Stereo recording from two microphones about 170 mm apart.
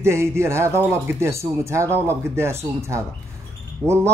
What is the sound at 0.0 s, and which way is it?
Speech, 15° right (ahead or behind).